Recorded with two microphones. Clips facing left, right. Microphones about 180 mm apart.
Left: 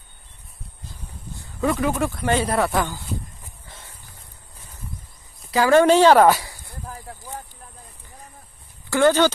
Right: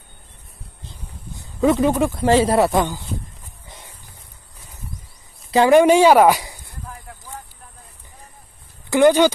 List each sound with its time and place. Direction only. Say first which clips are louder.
1.0 s speech: even; 15° right (ahead or behind)
3.6 s a sound: right 3 dB; 15° right (ahead or behind)
5.7 s speech: right 1 dB; 15° right (ahead or behind)
8.9 s speech: right 3 dB; 15° right (ahead or behind)